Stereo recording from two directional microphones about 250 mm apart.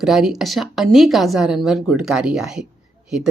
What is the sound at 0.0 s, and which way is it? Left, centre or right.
Speech, centre.